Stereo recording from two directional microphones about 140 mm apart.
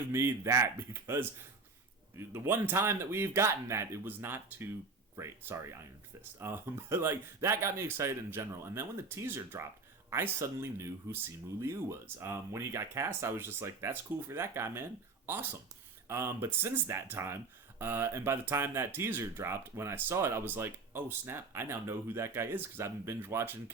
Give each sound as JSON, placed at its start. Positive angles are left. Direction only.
{"t": 0.1, "sound": "speech", "side_deg": -20}
{"t": 16.0, "sound": "speech", "side_deg": -20}